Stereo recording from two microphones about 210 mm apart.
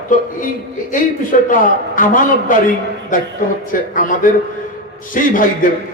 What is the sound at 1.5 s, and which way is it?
A man's voice, 40° left (ahead or behind).